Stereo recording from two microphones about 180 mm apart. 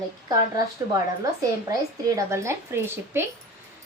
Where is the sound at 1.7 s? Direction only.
15° right (ahead or behind).